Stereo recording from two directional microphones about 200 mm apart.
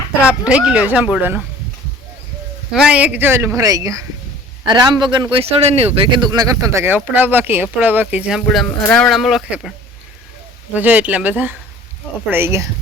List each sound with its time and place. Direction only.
0.3 s speech: 5° right (ahead or behind)
2.7 s speech: 5° right (ahead or behind); by 6.2 s 30° right (ahead or behind)
6.3 s speech: 15° right (ahead or behind); by 9.7 s centre (ahead or behind)
10.8 s speech: 10° right (ahead or behind)